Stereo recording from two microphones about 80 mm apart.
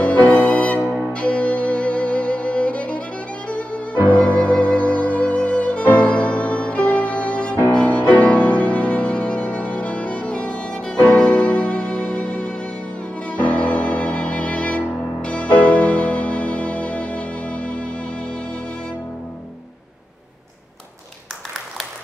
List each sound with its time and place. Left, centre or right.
0.0 s music: centre